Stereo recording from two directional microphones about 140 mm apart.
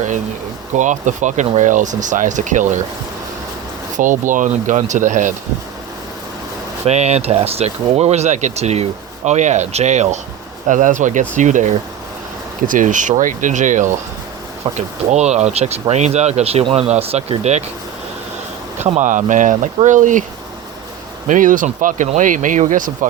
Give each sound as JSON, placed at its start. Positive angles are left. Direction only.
{"t": 0.7, "sound": "speech", "side_deg": -60}
{"t": 3.9, "sound": "speech", "side_deg": -65}
{"t": 6.8, "sound": "speech", "side_deg": -50}
{"t": 10.7, "sound": "speech", "side_deg": -65}
{"t": 18.8, "sound": "speech", "side_deg": -60}
{"t": 21.2, "sound": "speech", "side_deg": -70}